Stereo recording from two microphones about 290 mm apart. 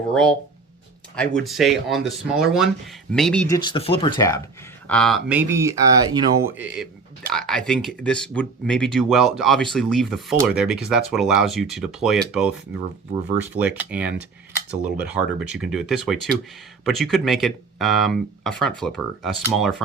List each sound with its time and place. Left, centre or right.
0.1 s speech: centre
3.5 s speech: centre
7.3 s speech: centre